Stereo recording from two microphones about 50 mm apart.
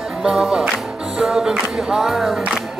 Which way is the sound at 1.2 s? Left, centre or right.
Centre.